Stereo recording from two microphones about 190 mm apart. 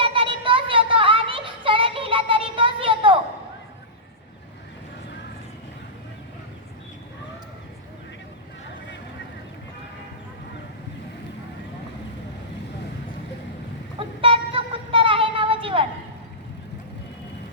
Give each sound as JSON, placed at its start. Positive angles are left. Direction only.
{"t": 0.0, "sound": "child singing", "side_deg": -25}
{"t": 14.2, "sound": "vehicle", "side_deg": -30}